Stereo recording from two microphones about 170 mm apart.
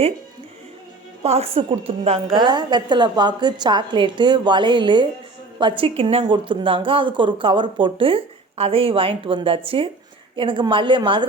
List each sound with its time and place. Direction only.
1.2 s speech: 40° right (ahead or behind)
2.0 s a woman's voice: 30° right (ahead or behind)